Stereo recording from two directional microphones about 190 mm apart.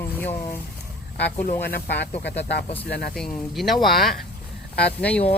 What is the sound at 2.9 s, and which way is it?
Speech, 55° left (ahead or behind).